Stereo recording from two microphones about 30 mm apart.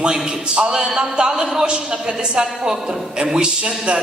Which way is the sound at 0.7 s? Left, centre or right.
Right.